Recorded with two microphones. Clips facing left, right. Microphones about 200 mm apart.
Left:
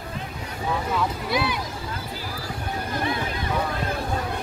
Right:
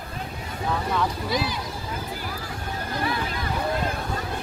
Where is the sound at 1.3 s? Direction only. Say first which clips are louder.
Left 1 dB; 60° left (ahead or behind).